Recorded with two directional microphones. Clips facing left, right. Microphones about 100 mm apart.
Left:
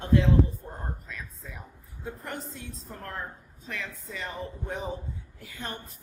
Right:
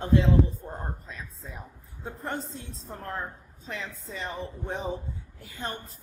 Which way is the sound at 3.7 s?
30° right (ahead or behind).